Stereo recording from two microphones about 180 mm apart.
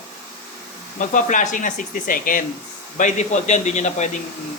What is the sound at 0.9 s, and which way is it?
A man's voice, 45° left (ahead or behind).